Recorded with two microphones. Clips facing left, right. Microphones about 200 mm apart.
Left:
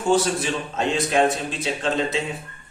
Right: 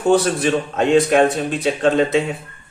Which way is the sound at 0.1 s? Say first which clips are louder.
Right 5 dB; 60° right (ahead or behind).